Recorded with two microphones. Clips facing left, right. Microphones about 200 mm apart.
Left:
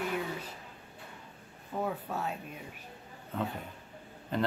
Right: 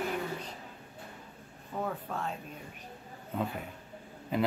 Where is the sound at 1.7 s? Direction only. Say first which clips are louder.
Left 1 dB; 10° left (ahead or behind).